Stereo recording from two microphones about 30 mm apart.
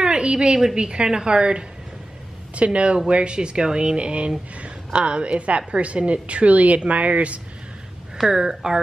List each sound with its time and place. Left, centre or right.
0.0 s a sound: right
0.7 s speech: right
2.5 s a woman's voice: right
8.2 s speech: centre